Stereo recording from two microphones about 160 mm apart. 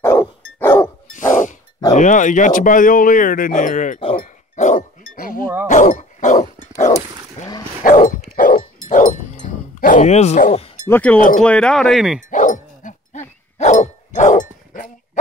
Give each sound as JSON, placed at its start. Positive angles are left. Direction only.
{"t": 0.0, "sound": "dog", "side_deg": 15}
{"t": 1.1, "sound": "a sound", "side_deg": 55}
{"t": 2.0, "sound": "speech", "side_deg": 50}
{"t": 4.2, "sound": "chink", "side_deg": 50}
{"t": 5.7, "sound": "dog", "side_deg": 50}
{"t": 10.9, "sound": "speech", "side_deg": 10}
{"t": 12.3, "sound": "dog", "side_deg": 55}